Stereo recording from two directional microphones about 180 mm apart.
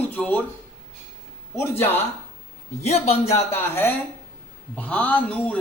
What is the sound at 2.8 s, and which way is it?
Speech, 35° left (ahead or behind).